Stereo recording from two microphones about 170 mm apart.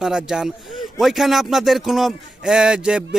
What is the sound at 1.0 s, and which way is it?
A man's voice, centre (ahead or behind).